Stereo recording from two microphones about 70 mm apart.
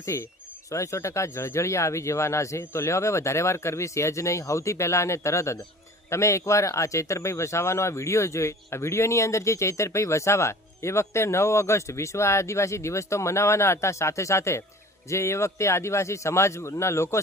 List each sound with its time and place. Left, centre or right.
0.1 s speech: left